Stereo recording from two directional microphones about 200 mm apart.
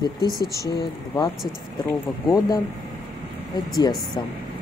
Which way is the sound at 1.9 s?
15° left (ahead or behind).